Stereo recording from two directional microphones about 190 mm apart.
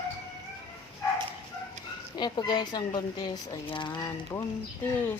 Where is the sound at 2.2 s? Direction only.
20° left (ahead or behind).